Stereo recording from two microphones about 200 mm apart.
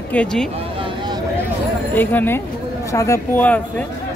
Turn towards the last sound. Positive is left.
turn(degrees=10)  # may be behind; listen again after turning